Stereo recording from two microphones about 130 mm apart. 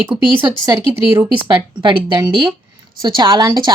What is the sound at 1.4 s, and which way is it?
Speech, 35° right (ahead or behind).